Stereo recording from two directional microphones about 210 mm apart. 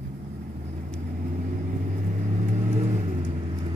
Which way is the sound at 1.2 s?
35° right (ahead or behind).